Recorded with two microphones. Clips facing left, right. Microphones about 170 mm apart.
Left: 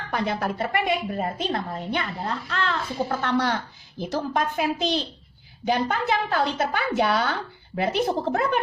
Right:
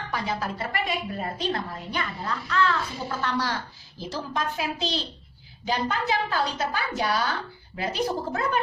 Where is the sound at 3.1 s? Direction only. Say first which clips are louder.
Left 4 dB; 60° left (ahead or behind).